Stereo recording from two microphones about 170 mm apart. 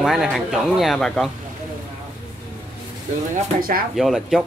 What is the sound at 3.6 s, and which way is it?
Speech, 60° right (ahead or behind).